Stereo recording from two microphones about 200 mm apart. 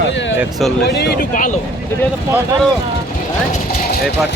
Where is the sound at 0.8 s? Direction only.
55° left (ahead or behind).